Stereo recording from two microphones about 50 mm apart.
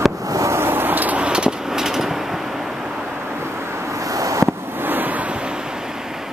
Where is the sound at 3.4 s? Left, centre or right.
Right.